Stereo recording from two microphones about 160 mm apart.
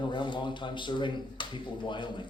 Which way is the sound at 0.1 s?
30° left (ahead or behind).